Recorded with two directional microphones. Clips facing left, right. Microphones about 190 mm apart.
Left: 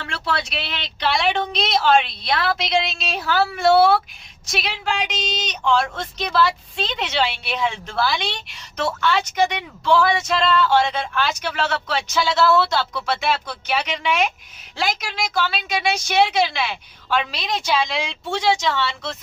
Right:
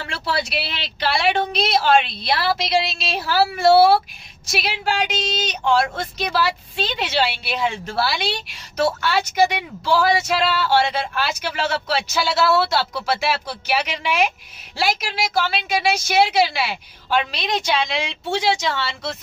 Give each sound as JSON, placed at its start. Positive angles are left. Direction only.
{"t": 0.1, "sound": "a woman's voice", "side_deg": -5}
{"t": 9.8, "sound": "speech", "side_deg": -35}
{"t": 10.3, "sound": "a woman's voice", "side_deg": -5}